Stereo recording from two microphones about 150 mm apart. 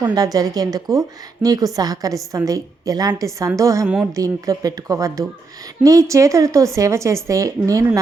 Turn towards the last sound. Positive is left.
turn(degrees=-20)  # may be behind; listen again after turning